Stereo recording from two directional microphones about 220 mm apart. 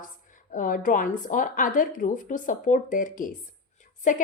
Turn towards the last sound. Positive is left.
turn(degrees=35)  # may be behind; listen again after turning